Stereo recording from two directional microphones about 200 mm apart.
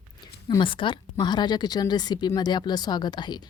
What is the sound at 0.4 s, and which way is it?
Speech, 25° left (ahead or behind).